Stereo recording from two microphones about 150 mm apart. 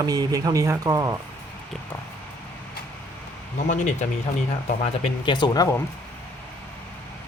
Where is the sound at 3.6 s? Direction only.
50° left (ahead or behind).